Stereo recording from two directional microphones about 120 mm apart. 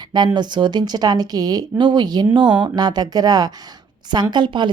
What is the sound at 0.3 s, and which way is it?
Speech, 40° right (ahead or behind).